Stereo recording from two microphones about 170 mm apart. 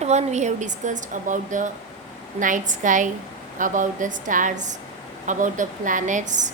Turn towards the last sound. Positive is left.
turn(degrees=-45)  # may be behind; listen again after turning